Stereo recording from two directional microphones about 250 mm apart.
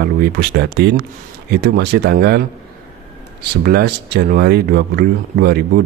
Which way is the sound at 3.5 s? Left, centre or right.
Right.